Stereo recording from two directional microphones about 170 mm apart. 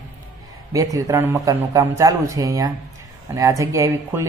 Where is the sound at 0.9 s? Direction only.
20° right (ahead or behind).